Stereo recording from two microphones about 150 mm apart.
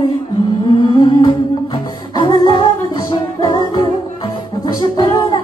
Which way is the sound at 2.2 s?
30° left (ahead or behind).